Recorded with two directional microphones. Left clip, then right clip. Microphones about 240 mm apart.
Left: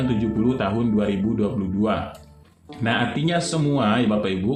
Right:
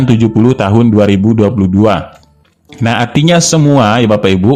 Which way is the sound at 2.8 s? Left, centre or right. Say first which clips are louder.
Right 11 dB; right.